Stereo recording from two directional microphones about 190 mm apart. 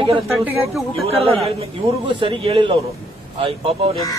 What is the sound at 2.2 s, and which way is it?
Speech, 30° right (ahead or behind).